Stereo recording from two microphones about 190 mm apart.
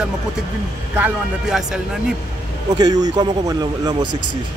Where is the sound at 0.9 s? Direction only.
5° right (ahead or behind).